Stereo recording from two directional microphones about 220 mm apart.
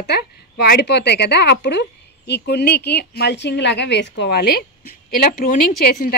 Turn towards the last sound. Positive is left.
turn(degrees=45)  # may be behind; listen again after turning